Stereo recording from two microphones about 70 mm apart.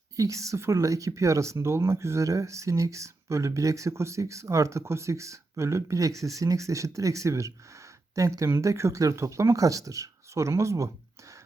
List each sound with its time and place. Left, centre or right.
0.2 s speech: right